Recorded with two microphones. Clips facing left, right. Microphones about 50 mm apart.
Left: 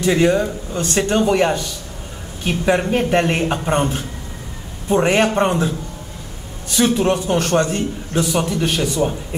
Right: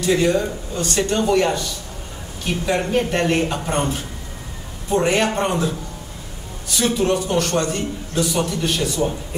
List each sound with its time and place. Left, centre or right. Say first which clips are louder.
0.0 s a man's voice: left 2 dB; left
6.8 s a man's voice: left 3 dB; left